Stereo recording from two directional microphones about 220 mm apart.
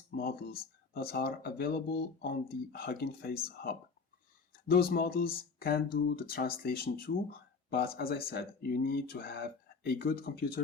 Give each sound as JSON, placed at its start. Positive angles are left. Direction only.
{"t": 0.2, "sound": "speech", "side_deg": 45}